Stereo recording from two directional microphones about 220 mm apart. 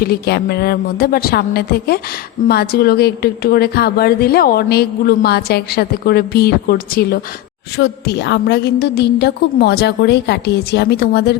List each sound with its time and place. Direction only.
0.1 s a woman's voice: 45° left (ahead or behind)